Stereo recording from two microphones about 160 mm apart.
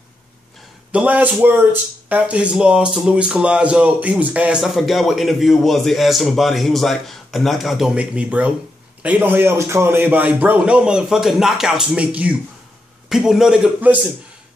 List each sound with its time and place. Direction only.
0.9 s speech: 10° right (ahead or behind)